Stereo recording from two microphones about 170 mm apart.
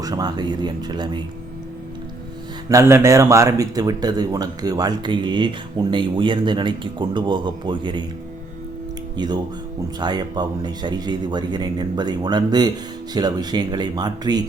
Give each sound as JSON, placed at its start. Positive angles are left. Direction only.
{"t": 0.0, "sound": "speech", "side_deg": -25}
{"t": 2.6, "sound": "speech", "side_deg": -15}
{"t": 9.1, "sound": "speech", "side_deg": -25}